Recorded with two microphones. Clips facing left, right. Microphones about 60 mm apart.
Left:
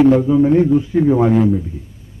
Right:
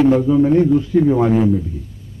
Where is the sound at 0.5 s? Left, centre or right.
Centre.